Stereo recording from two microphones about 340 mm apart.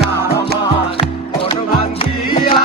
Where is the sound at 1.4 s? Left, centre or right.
Centre.